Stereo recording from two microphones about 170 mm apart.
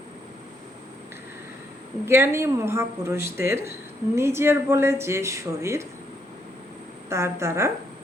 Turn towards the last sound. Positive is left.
turn(degrees=-15)  # may be behind; listen again after turning